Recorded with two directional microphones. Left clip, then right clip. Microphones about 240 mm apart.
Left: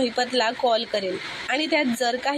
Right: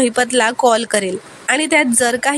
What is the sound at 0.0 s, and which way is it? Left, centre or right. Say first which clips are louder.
A woman's voice: right 8 dB; right.